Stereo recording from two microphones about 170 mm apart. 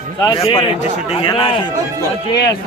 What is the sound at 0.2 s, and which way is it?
A man's voice, 20° left (ahead or behind).